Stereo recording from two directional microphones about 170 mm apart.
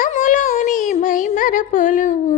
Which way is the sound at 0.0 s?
50° left (ahead or behind).